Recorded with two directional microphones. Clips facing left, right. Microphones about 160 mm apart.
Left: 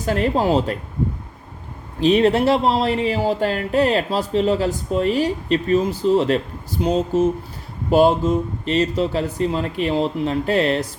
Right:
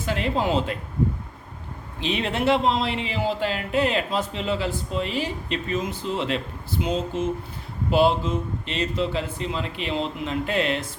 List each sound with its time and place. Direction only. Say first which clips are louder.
0.0 s a man's voice: left 5 dB; 40° left (ahead or behind)
2.0 s a man's voice: left 10 dB; 40° left (ahead or behind)